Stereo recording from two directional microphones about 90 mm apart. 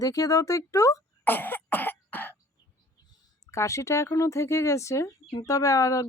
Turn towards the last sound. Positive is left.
turn(degrees=35)  # may be behind; listen again after turning